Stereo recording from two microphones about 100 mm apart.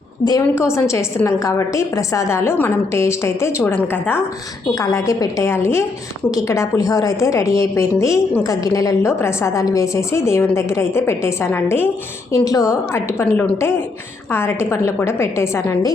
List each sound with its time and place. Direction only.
0.3 s a woman's voice: 30° left (ahead or behind)
4.7 s a woman's voice: 35° left (ahead or behind)
12.3 s a woman's voice: 35° left (ahead or behind)